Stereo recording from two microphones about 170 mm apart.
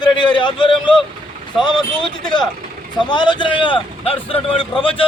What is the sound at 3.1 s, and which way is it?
A man's voice, 25° left (ahead or behind).